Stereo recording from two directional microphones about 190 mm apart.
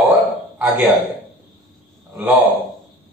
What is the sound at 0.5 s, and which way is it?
Speech, 10° right (ahead or behind).